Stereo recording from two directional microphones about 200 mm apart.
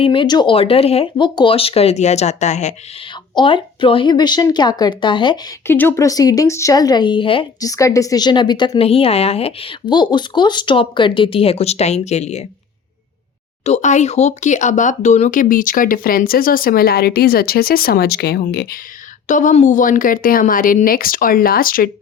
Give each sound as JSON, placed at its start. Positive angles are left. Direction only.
{"t": 0.0, "sound": "a woman's voice", "side_deg": 25}
{"t": 3.3, "sound": "a woman's voice", "side_deg": 25}
{"t": 5.6, "sound": "a woman's voice", "side_deg": 10}
{"t": 13.7, "sound": "speech", "side_deg": 35}
{"t": 19.3, "sound": "speech", "side_deg": 40}